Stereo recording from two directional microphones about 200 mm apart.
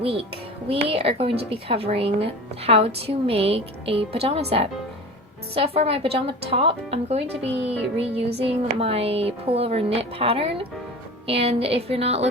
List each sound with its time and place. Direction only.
0.0 s a woman's voice: 30° right (ahead or behind)